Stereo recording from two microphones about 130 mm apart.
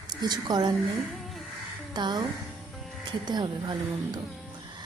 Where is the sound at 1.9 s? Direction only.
35° right (ahead or behind).